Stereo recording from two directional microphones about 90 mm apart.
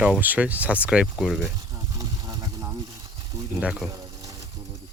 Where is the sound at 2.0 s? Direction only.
45° right (ahead or behind).